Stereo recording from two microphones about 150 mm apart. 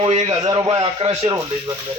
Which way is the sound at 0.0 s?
35° right (ahead or behind).